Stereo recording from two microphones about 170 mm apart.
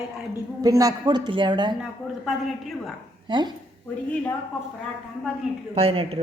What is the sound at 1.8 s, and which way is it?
A woman's voice, centre (ahead or behind).